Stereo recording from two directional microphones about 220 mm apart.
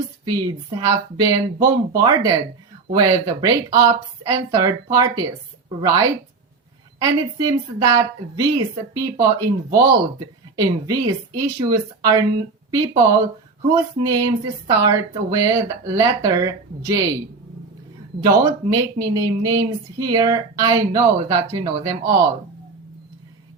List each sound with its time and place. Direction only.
0.3 s a woman's voice: 15° right (ahead or behind)
18.7 s speech: 15° right (ahead or behind)